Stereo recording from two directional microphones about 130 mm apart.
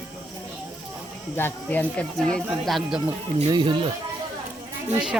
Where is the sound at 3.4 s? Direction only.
35° right (ahead or behind).